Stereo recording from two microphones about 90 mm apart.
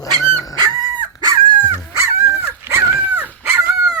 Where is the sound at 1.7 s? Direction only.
35° right (ahead or behind).